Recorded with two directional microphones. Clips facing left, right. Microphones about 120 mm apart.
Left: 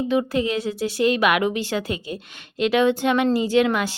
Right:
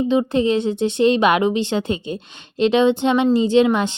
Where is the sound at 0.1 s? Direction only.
20° right (ahead or behind).